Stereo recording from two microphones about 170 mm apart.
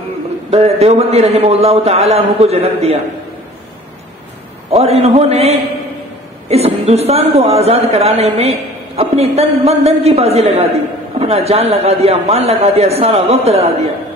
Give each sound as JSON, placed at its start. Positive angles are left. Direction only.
{"t": 0.5, "sound": "a man's voice", "side_deg": -35}
{"t": 4.6, "sound": "a man's voice", "side_deg": -35}